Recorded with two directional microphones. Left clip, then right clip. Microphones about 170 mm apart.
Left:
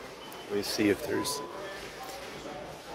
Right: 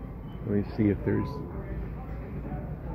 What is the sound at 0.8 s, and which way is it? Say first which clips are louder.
Speech: even; 35° left (ahead or behind).